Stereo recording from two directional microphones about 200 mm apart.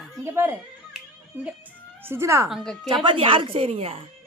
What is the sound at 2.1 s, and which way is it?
A woman's voice, 15° right (ahead or behind).